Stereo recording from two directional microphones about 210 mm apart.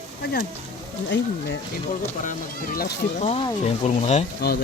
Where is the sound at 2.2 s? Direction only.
40° left (ahead or behind).